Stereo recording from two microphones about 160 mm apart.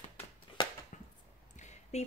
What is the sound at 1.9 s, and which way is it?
Speech, 40° left (ahead or behind).